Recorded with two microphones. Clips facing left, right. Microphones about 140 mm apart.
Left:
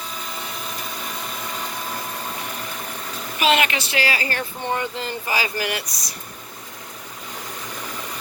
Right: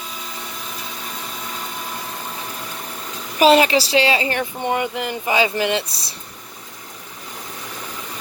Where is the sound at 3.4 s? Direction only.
35° right (ahead or behind).